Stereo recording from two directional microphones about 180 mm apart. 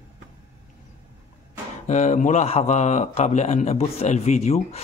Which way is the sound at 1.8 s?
40° left (ahead or behind).